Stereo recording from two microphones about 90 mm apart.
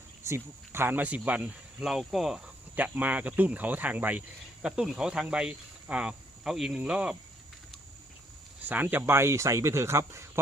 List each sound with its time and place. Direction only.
0.2 s speech: 30° right (ahead or behind)
1.8 s speech: 5° right (ahead or behind)
2.7 s speech: 20° right (ahead or behind)
8.6 s speech: 20° right (ahead or behind)